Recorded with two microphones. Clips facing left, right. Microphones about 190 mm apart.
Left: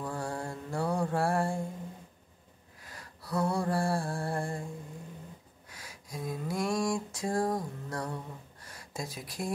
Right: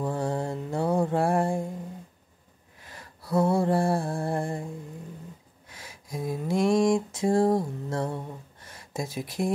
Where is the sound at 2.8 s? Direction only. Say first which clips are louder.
Right 2 dB; 25° right (ahead or behind).